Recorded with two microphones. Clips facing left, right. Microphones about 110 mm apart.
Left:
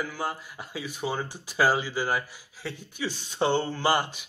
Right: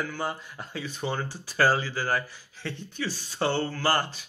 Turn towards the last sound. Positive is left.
turn(degrees=15)  # may be behind; listen again after turning